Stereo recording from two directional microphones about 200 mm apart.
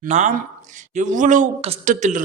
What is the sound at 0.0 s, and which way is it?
A man's voice, 40° right (ahead or behind).